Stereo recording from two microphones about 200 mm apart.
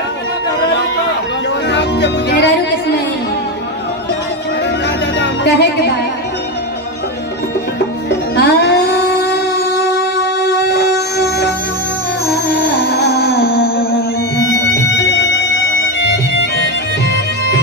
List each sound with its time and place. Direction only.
1.7 s music: 60° left (ahead or behind)
4.8 s music: 60° left (ahead or behind)
8.4 s music: 55° left (ahead or behind)
9.2 s a sound: 55° left (ahead or behind)
12.8 s music: 50° left (ahead or behind)
14.5 s music: 55° left (ahead or behind)